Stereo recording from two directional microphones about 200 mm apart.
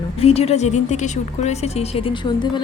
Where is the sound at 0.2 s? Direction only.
30° left (ahead or behind).